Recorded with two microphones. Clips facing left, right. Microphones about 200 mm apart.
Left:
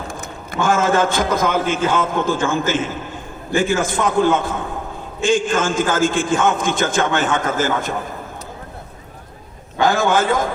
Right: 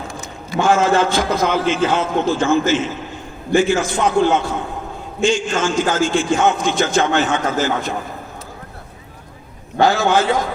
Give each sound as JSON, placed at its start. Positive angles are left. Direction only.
{"t": 0.1, "sound": "a man's voice", "side_deg": 55}
{"t": 9.8, "sound": "a man's voice", "side_deg": 50}